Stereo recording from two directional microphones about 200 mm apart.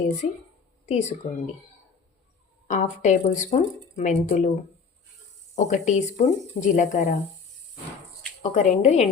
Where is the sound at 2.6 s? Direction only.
35° left (ahead or behind).